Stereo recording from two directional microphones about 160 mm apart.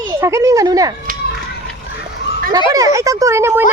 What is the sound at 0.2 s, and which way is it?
Speech, 15° right (ahead or behind).